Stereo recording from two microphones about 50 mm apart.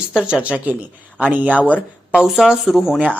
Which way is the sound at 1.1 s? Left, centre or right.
Right.